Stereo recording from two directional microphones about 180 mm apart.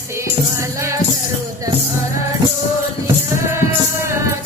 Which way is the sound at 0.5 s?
15° right (ahead or behind).